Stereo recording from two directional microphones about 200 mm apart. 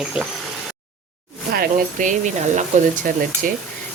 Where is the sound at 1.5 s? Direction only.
45° right (ahead or behind).